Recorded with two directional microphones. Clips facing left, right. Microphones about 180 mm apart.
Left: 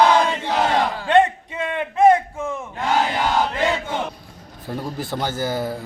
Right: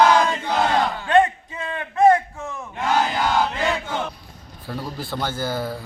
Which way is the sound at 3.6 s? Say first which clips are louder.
Left 2 dB; 20° left (ahead or behind).